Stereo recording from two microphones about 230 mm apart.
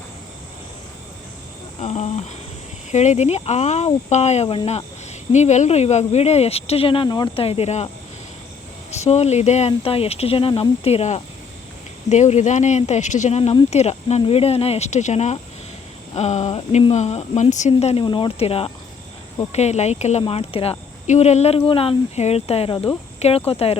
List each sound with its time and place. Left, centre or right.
1.8 s speech: left
8.9 s speech: left